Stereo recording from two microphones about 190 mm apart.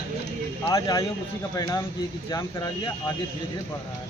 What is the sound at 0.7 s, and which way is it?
Speech, 20° left (ahead or behind).